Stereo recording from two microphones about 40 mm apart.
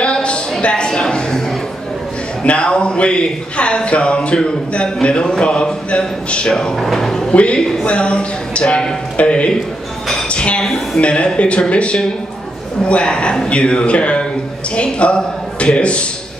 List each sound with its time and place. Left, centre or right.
0.0 s a sound: left
2.4 s a man's voice: left
6.8 s speech: centre
7.3 s a man's voice: left